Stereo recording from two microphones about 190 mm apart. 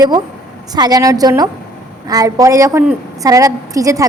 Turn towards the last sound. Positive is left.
turn(degrees=-15)  # may be behind; listen again after turning